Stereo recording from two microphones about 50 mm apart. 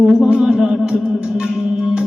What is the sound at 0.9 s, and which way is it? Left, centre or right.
Music, right.